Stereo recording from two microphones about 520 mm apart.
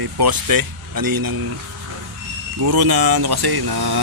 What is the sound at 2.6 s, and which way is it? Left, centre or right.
Speech, right.